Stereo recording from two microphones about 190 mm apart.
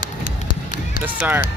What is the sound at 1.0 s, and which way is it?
Music, 10° right (ahead or behind).